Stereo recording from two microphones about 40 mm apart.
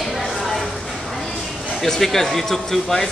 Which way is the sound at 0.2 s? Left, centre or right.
Centre.